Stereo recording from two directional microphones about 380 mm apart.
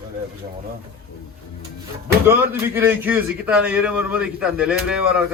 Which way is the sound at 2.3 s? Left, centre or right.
Centre.